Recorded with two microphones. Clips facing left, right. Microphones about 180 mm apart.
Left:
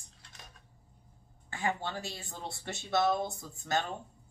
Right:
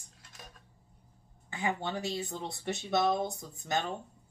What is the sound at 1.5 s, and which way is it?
Speech, 20° right (ahead or behind).